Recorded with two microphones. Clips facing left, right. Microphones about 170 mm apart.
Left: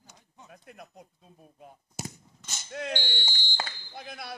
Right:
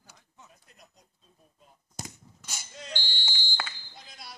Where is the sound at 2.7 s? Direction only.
60° left (ahead or behind).